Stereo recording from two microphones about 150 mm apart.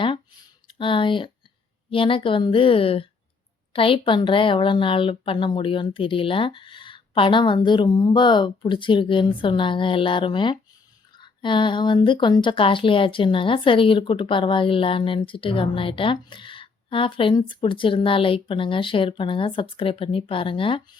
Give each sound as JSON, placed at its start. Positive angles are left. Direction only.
{"t": 0.7, "sound": "speech", "side_deg": 35}